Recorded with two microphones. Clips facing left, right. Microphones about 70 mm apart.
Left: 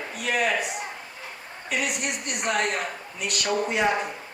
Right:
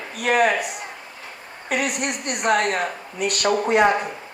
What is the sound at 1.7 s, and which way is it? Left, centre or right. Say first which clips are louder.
Speech: right 4 dB; right.